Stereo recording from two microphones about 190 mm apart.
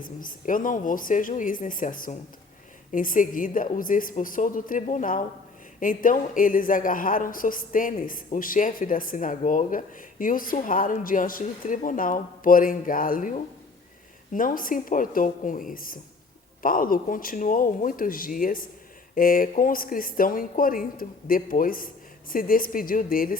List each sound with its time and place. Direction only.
0.0 s a woman's voice: 45° left (ahead or behind)